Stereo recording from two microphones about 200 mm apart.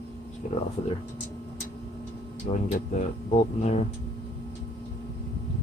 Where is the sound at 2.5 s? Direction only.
35° left (ahead or behind).